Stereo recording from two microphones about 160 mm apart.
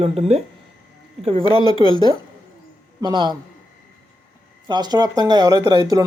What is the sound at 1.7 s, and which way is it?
Speech, 25° left (ahead or behind).